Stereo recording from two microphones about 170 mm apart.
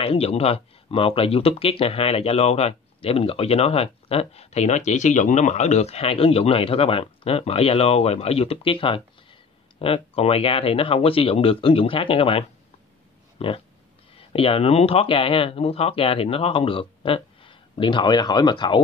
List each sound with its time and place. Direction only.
0.0 s speech: 35° left (ahead or behind)